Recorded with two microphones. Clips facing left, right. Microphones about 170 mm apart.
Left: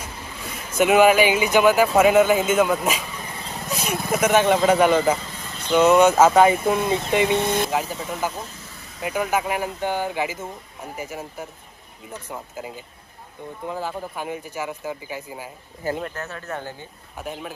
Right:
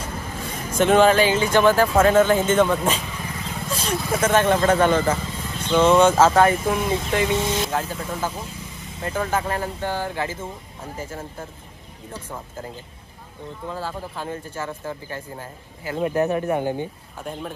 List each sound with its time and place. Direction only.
0.7 s speech: 10° left (ahead or behind)
3.6 s vehicle: 10° left (ahead or behind)
4.0 s speech: 10° left (ahead or behind)
6.8 s speech: 25° left (ahead or behind)
7.3 s speech: 55° left (ahead or behind)
7.7 s speech: 10° left (ahead or behind)
8.3 s speech: 10° right (ahead or behind)
9.0 s speech: 10° left (ahead or behind)
16.0 s speech: 15° right (ahead or behind)
17.2 s speech: 5° left (ahead or behind)